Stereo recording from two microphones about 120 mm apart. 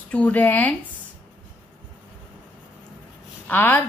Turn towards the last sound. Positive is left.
turn(degrees=15)  # may be behind; listen again after turning